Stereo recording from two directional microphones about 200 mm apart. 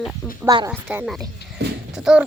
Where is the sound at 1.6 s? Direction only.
55° right (ahead or behind).